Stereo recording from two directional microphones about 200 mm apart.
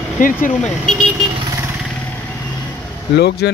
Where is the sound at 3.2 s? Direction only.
55° left (ahead or behind).